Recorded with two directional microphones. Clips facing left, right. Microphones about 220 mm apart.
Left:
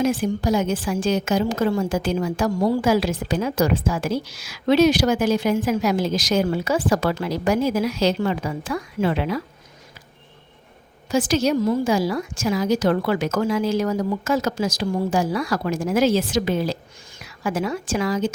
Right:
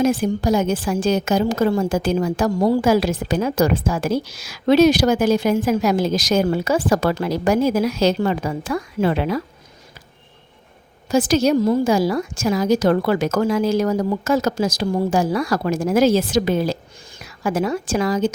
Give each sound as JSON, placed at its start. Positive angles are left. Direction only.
{"t": 0.0, "sound": "a woman's voice", "side_deg": -40}
{"t": 11.1, "sound": "a woman's voice", "side_deg": -40}